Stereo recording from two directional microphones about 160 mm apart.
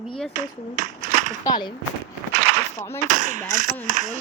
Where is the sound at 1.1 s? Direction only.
55° right (ahead or behind).